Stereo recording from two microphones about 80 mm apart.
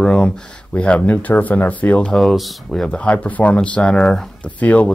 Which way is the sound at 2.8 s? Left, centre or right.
Centre.